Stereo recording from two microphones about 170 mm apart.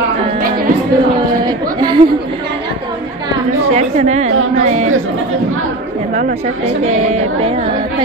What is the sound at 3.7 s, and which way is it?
Speech, 40° right (ahead or behind).